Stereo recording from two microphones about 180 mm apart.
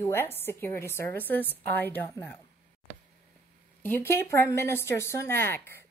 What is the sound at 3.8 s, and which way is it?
A woman's voice, 10° left (ahead or behind).